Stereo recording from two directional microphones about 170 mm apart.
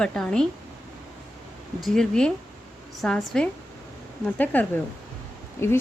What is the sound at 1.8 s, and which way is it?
A woman's voice, centre (ahead or behind).